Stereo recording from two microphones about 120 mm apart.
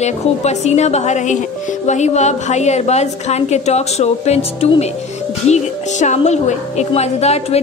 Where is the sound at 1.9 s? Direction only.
75° left (ahead or behind).